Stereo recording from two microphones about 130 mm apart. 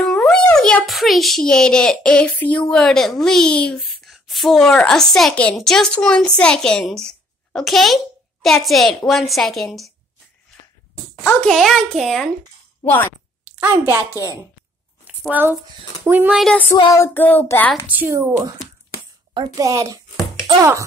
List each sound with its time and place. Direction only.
0.0 s a sound: 5° left (ahead or behind)
2.7 s a woman's voice: 5° left (ahead or behind)
11.2 s a woman's voice: 5° left (ahead or behind)
12.8 s child singing: 15° left (ahead or behind)
13.5 s a woman's voice: 15° right (ahead or behind)
15.0 s a sound: 10° right (ahead or behind)
16.0 s speech: 10° right (ahead or behind)
16.7 s child singing: 35° left (ahead or behind)
17.0 s child singing: 15° left (ahead or behind)
17.8 s a woman's voice: 15° right (ahead or behind)